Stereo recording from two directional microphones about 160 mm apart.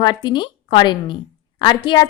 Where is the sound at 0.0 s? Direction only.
30° left (ahead or behind).